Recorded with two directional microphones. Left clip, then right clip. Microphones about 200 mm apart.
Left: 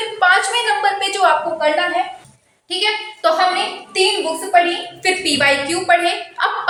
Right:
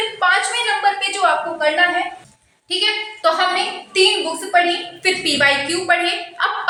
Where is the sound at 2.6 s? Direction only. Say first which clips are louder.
Even; 10° left (ahead or behind).